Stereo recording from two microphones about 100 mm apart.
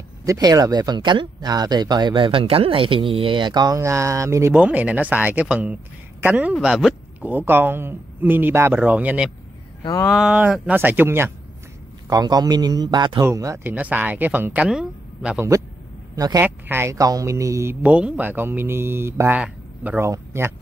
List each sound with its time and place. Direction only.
0.2 s speech: 35° right (ahead or behind)
3.7 s speech: 30° right (ahead or behind)
4.6 s speech: 15° right (ahead or behind)
9.8 s speech: 30° left (ahead or behind)
10.3 s speech: 15° right (ahead or behind)
12.1 s speech: 40° right (ahead or behind)
13.2 s speech: 30° right (ahead or behind)
13.7 s speech: 15° right (ahead or behind)
16.3 s speech: 20° right (ahead or behind)
17.8 s speech: 10° right (ahead or behind)
19.3 s speech: 15° right (ahead or behind)
20.0 s speech: 25° right (ahead or behind)